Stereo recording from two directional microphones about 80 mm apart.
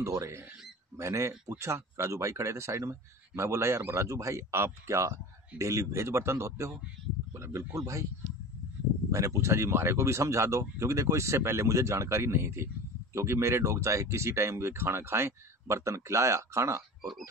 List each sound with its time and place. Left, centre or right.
0.0 s speech: right
9.1 s speech: right